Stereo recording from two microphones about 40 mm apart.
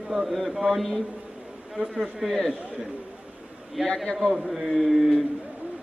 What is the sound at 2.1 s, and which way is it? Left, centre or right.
Speech, centre.